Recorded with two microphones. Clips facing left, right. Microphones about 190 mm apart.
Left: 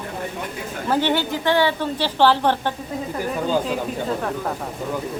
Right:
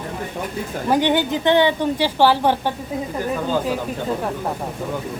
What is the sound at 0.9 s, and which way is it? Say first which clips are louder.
A woman's voice: right 3 dB; 15° right (ahead or behind).